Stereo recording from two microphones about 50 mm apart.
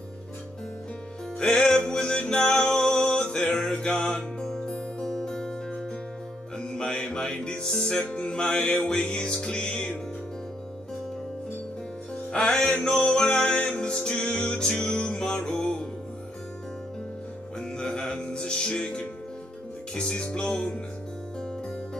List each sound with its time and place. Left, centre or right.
1.4 s music: centre
6.6 s music: centre
12.3 s music: centre
17.6 s music: centre